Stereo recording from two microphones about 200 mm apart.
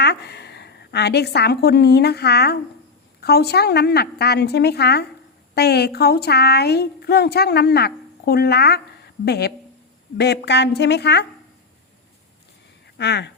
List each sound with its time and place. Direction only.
0.0 s a woman's voice: 55° left (ahead or behind)
13.0 s a woman's voice: 60° left (ahead or behind)